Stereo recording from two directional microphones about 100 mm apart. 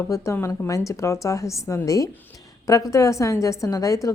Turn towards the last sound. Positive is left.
turn(degrees=35)  # may be behind; listen again after turning